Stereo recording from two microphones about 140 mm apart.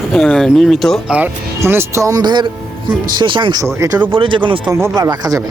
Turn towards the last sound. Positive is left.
turn(degrees=-25)  # may be behind; listen again after turning